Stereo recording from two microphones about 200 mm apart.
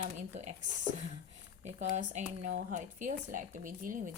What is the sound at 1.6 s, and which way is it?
Speech, 40° right (ahead or behind).